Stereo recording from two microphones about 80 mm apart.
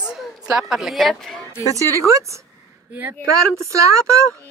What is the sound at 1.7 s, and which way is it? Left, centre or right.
Speech, right.